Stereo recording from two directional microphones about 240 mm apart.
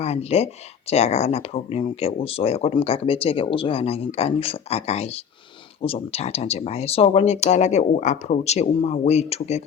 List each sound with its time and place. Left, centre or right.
0.0 s speech: left